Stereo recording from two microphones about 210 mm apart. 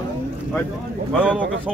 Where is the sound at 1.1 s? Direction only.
5° right (ahead or behind).